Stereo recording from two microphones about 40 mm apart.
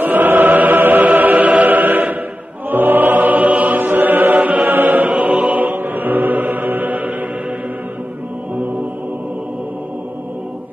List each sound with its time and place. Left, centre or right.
0.0 s choir: right
4.6 s choir: right
5.0 s choir: right
5.6 s choir: right